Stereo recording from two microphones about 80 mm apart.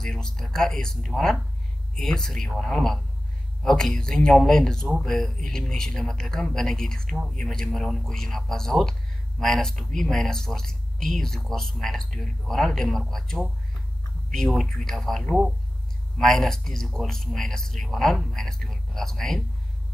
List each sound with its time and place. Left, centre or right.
0.0 s speech: centre